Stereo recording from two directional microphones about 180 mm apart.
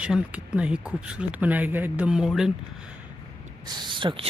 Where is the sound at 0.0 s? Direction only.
5° right (ahead or behind).